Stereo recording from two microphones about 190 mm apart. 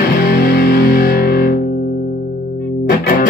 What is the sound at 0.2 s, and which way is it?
Music, 55° left (ahead or behind).